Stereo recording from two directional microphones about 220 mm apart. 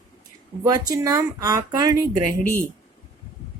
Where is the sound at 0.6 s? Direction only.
15° right (ahead or behind).